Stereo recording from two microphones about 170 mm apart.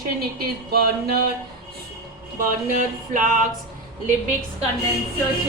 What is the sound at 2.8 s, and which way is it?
Music, 50° right (ahead or behind).